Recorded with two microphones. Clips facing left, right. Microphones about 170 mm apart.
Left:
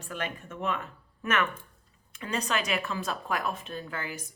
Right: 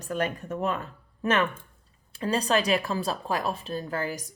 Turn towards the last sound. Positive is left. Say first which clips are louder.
# right 6 dB
turn(degrees=-40)  # may be behind; listen again after turning